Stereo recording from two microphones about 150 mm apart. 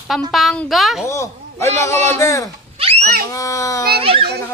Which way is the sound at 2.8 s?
40° right (ahead or behind).